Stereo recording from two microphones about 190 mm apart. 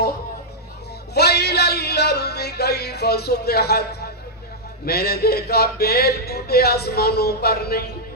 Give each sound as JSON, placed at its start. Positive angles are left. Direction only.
{"t": 1.1, "sound": "music", "side_deg": 60}
{"t": 4.9, "sound": "speech", "side_deg": 55}